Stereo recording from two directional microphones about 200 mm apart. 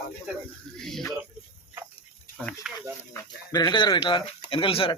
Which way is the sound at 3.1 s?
20° left (ahead or behind).